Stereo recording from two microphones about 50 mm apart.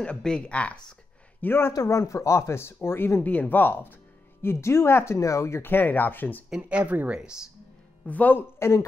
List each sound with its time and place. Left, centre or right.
0.2 s speech: centre
1.4 s a man's voice: left
1.9 s speech: left
5.6 s speech: left
6.8 s speech: right
7.1 s speech: centre
8.1 s speech: left
8.4 s speech: left